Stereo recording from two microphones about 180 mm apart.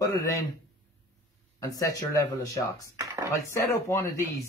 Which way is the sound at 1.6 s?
20° left (ahead or behind).